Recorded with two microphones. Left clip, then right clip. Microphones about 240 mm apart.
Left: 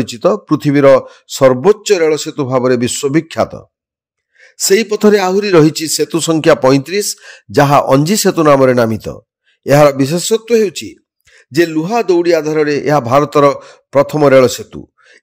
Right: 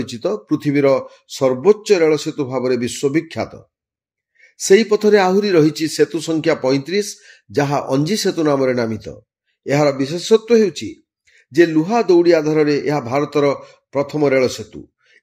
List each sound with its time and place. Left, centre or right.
0.0 s speech: left
4.4 s a sound: left
4.9 s speech: left